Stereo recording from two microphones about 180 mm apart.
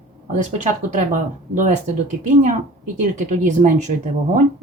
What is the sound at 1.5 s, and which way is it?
Speech, 40° right (ahead or behind).